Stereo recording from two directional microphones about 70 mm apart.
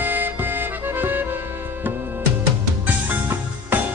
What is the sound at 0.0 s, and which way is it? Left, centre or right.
Music, right.